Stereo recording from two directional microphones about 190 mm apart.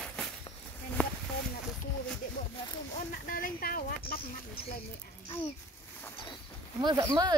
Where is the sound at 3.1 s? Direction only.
50° left (ahead or behind).